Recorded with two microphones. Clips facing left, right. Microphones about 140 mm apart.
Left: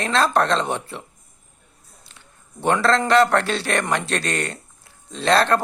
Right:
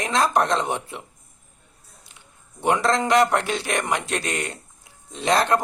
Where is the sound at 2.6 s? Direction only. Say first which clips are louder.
Left 2 dB; 15° right (ahead or behind).